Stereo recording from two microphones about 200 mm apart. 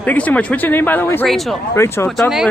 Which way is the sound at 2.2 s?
Centre (ahead or behind).